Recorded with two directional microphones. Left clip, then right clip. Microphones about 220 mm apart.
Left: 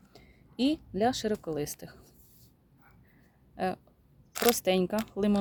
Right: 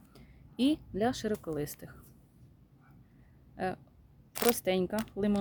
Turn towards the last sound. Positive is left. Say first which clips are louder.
# left 3 dB
turn(degrees=15)  # may be behind; listen again after turning